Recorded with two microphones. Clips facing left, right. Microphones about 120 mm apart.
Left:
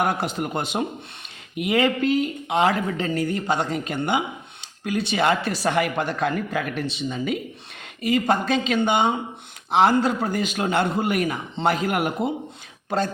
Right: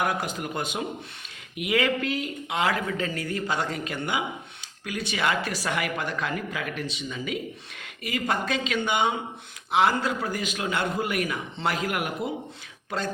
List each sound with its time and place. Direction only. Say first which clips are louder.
0.2 s speech: left 4 dB; 65° left (ahead or behind)
1.5 s speech: left 4 dB; 30° left (ahead or behind)
6.1 s speech: left 6 dB; 55° left (ahead or behind)
6.9 s speech: left 6 dB; 40° left (ahead or behind)